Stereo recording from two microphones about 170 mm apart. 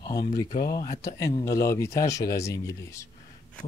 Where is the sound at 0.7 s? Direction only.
20° left (ahead or behind).